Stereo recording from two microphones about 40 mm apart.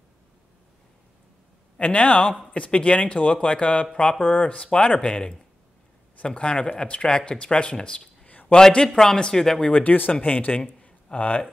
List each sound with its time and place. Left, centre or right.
1.8 s a man's voice: left
4.2 s speech: left
8.3 s a sound: left
8.5 s a man's voice: centre
9.7 s a man's voice: left
10.9 s a sound: left